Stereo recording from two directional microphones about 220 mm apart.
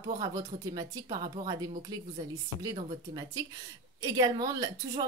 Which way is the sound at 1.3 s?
20° right (ahead or behind).